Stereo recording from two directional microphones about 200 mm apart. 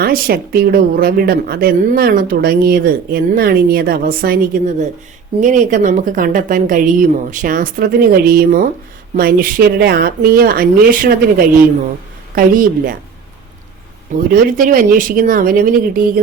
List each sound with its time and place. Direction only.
0.0 s speech: 50° right (ahead or behind)
14.3 s speech: 45° right (ahead or behind)